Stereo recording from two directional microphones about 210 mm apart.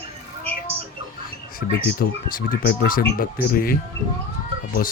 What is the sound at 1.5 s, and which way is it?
Speech, 40° left (ahead or behind).